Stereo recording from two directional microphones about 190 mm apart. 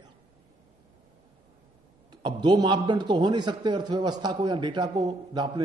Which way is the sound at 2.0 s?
25° right (ahead or behind).